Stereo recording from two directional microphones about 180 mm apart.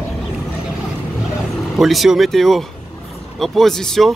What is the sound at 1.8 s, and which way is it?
Speech, centre (ahead or behind).